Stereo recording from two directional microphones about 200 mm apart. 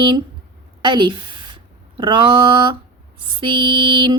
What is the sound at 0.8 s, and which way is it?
Speech, 25° right (ahead or behind).